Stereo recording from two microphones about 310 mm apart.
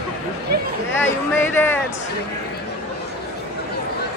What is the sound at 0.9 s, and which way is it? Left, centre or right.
Speech, centre.